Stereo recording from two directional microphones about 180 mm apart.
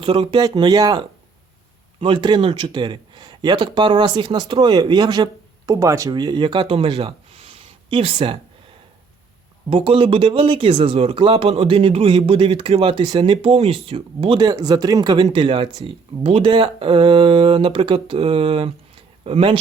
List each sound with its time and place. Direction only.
0.0 s speech: 30° right (ahead or behind)
9.6 s speech: 30° right (ahead or behind)